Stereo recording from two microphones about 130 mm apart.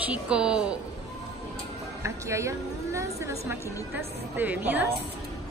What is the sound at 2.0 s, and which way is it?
A woman's voice, 20° right (ahead or behind).